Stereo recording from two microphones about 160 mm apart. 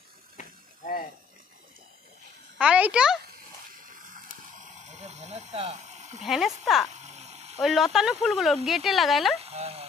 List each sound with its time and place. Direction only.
0.4 s vehicle: 55° left (ahead or behind)
2.5 s speech: 5° right (ahead or behind)
4.9 s snake: 45° right (ahead or behind)
6.2 s speech: centre (ahead or behind)
6.9 s a sound: 45° right (ahead or behind)
7.6 s speech: centre (ahead or behind)
9.4 s speech: 40° right (ahead or behind)